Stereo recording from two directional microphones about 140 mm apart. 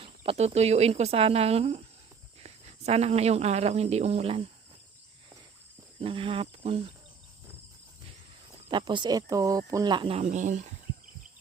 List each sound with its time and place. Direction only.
0.0 s speech: 40° right (ahead or behind)
6.0 s cricket: 40° right (ahead or behind)
8.7 s speech: 35° right (ahead or behind)
10.2 s speech: 60° right (ahead or behind)